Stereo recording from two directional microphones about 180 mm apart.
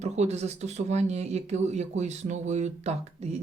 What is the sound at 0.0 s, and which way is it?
Speech, 35° right (ahead or behind).